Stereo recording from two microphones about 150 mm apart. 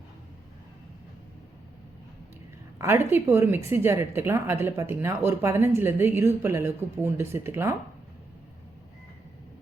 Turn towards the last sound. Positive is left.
turn(degrees=-15)  # may be behind; listen again after turning